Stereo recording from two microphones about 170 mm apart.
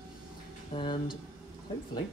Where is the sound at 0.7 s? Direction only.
40° left (ahead or behind).